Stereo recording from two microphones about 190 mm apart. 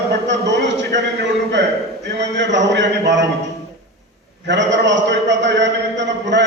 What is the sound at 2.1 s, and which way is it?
A man's voice, 70° right (ahead or behind).